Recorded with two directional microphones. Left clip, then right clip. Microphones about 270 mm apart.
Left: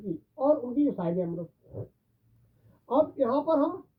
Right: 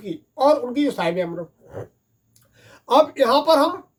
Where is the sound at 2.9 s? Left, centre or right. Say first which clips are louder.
Right 10 dB; centre.